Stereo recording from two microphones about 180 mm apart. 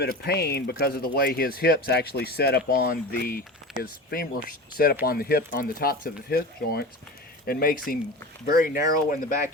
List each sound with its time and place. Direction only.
0.0 s speech: 60° left (ahead or behind)